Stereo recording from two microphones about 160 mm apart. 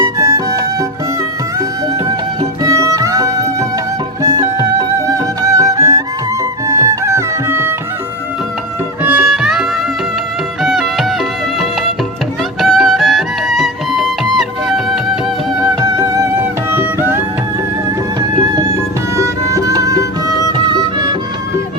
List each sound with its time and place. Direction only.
0.0 s music: 20° right (ahead or behind)
2.0 s music: 25° right (ahead or behind)
9.0 s music: 5° right (ahead or behind)
12.5 s music: centre (ahead or behind)
15.8 s music: 20° right (ahead or behind)
18.2 s music: 30° right (ahead or behind)